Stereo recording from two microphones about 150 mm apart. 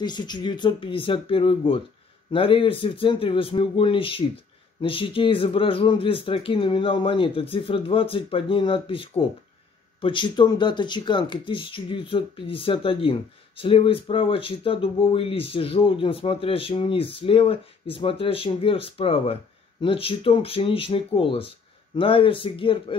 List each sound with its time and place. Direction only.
0.0 s speech: 30° left (ahead or behind)